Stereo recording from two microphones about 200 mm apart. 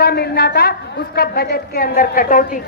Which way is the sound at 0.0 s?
50° left (ahead or behind).